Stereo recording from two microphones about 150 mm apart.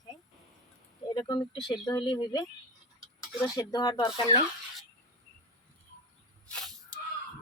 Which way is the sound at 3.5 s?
25° left (ahead or behind).